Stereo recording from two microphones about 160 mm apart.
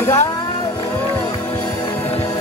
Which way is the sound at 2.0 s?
40° left (ahead or behind).